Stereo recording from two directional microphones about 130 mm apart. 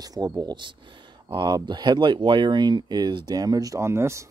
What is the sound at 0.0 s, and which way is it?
Speech, 30° right (ahead or behind).